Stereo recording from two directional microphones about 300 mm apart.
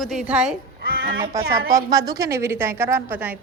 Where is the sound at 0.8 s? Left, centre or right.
Right.